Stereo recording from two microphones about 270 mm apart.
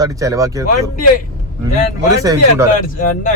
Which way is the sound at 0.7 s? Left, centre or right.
Left.